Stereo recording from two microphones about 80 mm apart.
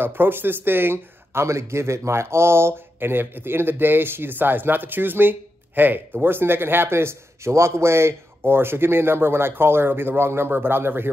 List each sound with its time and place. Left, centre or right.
0.0 s speech: right